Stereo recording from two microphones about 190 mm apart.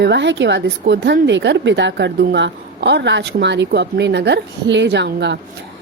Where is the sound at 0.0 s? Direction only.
65° right (ahead or behind).